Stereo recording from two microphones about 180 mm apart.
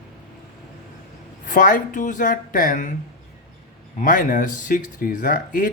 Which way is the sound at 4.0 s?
50° left (ahead or behind).